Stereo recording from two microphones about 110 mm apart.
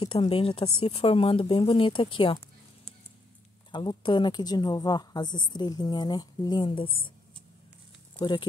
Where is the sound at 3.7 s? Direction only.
45° left (ahead or behind).